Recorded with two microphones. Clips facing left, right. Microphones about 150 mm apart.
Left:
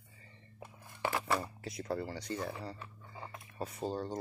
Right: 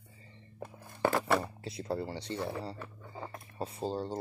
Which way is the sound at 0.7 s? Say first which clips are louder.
Right 6 dB; 45° right (ahead or behind).